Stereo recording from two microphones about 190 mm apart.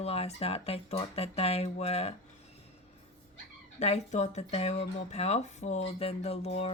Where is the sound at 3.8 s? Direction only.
35° left (ahead or behind).